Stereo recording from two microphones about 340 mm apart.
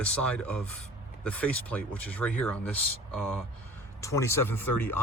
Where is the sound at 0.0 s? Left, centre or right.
Centre.